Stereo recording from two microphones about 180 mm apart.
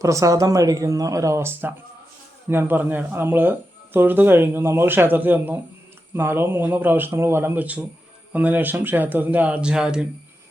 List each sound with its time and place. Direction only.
0.0 s speech: 15° right (ahead or behind)